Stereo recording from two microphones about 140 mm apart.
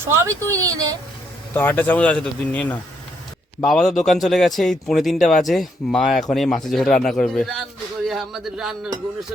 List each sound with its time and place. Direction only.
0.2 s speech: 25° right (ahead or behind)
1.5 s speech: 10° left (ahead or behind); by 8.9 s 5° right (ahead or behind)